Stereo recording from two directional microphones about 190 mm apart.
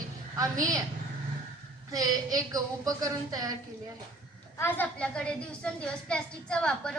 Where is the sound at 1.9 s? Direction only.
20° right (ahead or behind).